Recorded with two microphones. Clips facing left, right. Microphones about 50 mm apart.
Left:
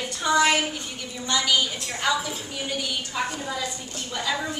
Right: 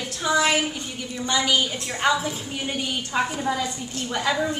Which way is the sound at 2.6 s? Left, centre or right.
Right.